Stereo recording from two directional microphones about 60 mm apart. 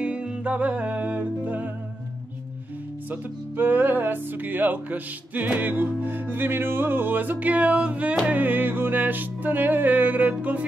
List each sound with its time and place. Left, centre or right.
0.0 s music: centre
3.1 s music: right